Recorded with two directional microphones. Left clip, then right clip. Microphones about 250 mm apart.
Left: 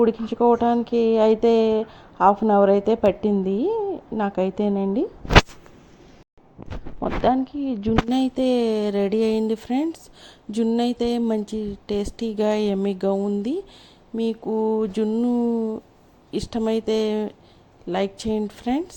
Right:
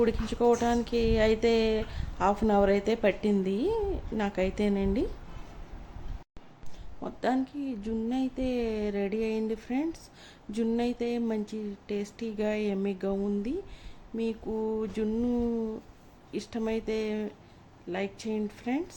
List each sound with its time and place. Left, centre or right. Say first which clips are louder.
0.0 s a woman's voice: left 7 dB; centre
7.0 s speech: left 9 dB; centre